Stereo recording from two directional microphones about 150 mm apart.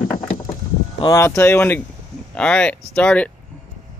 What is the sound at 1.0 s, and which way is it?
Speech, 20° left (ahead or behind).